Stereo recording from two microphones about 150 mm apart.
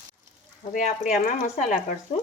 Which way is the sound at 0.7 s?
60° left (ahead or behind).